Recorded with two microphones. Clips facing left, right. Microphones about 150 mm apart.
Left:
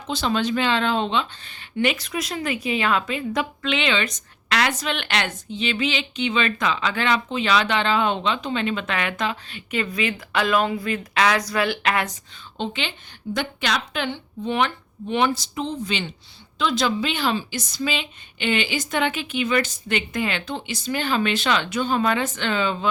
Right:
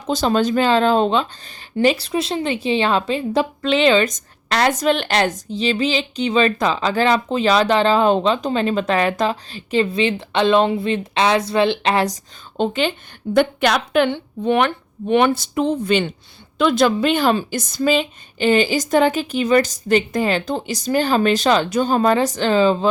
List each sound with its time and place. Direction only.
0.1 s a woman's voice: 40° right (ahead or behind)